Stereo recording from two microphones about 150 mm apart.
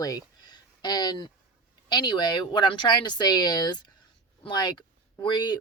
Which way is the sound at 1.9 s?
30° left (ahead or behind).